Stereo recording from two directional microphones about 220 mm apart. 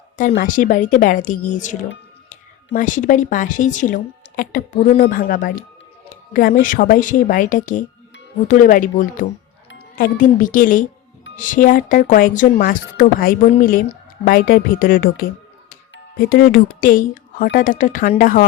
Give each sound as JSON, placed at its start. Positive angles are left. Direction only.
{"t": 0.2, "sound": "speech", "side_deg": 40}
{"t": 2.7, "sound": "speech", "side_deg": 35}